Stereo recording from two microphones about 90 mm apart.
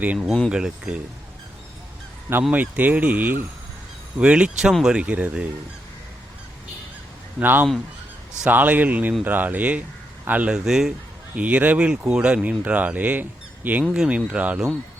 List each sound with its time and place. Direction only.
0.0 s speech: 15° right (ahead or behind)
2.5 s speech: 20° right (ahead or behind)
7.3 s speech: 20° right (ahead or behind)
10.6 s a man's voice: 5° right (ahead or behind)
11.3 s speech: 15° right (ahead or behind)